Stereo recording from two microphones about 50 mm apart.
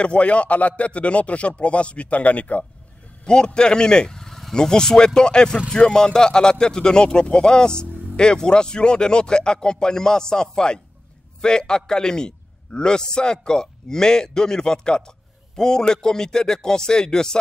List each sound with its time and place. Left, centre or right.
0.0 s speech: left
3.3 s a man's voice: centre